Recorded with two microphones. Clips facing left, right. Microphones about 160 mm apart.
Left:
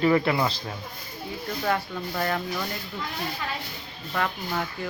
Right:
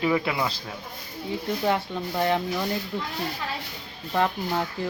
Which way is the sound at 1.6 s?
20° right (ahead or behind).